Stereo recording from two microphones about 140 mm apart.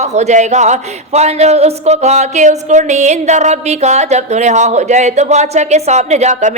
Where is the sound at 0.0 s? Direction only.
55° right (ahead or behind).